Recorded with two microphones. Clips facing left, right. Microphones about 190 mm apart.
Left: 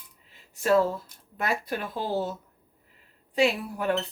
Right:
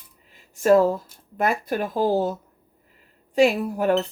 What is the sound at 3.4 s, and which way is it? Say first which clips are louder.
Speech: right 6 dB; 45° right (ahead or behind).